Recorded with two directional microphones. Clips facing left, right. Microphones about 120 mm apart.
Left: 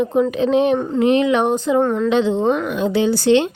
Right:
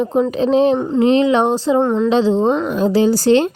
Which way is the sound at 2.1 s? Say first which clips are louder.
Right 3 dB; 35° right (ahead or behind).